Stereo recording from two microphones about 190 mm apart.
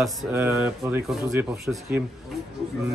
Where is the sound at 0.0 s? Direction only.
5° right (ahead or behind).